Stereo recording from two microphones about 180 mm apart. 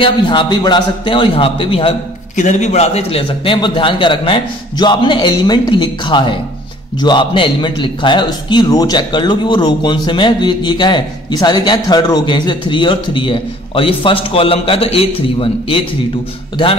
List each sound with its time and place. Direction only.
0.0 s a man's voice: 25° left (ahead or behind)
2.3 s a man's voice: 40° left (ahead or behind)